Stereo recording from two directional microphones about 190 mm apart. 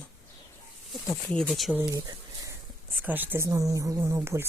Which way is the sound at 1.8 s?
20° right (ahead or behind).